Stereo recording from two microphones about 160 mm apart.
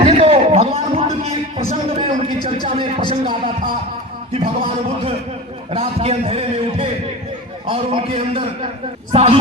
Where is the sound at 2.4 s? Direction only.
35° right (ahead or behind).